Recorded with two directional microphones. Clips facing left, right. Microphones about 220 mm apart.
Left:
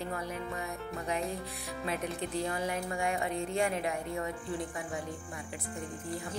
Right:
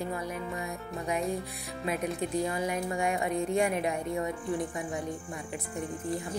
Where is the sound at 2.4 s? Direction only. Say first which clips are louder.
Right 1 dB; 15° right (ahead or behind).